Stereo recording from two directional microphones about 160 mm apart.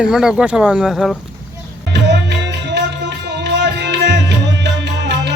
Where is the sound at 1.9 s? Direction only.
90° right.